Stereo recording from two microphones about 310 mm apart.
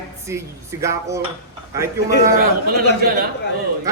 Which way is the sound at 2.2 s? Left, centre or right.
Right.